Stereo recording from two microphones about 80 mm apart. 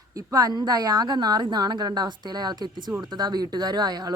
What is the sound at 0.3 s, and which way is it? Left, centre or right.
Speech, right.